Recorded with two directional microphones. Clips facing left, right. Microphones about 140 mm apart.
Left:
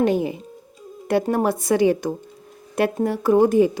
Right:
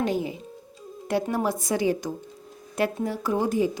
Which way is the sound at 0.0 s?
60° left (ahead or behind).